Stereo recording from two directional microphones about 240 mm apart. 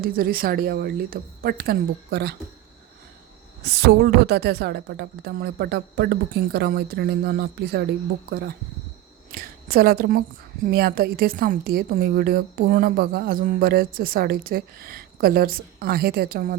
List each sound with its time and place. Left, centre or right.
0.0 s a woman's voice: right
3.6 s a woman's voice: right